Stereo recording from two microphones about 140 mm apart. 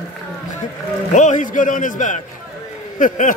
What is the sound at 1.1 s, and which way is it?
A man's voice, 60° left (ahead or behind).